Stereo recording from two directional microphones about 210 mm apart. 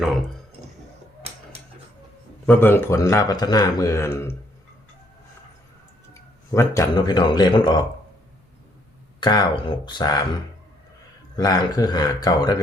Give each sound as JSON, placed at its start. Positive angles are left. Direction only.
{"t": 0.0, "sound": "speech", "side_deg": 0}
{"t": 2.5, "sound": "a man's voice", "side_deg": 10}
{"t": 6.1, "sound": "speech", "side_deg": 15}
{"t": 9.2, "sound": "speech", "side_deg": 20}
{"t": 11.3, "sound": "speech", "side_deg": 20}